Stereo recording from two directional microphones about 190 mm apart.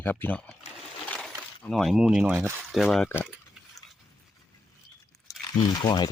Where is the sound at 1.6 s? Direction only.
Centre (ahead or behind).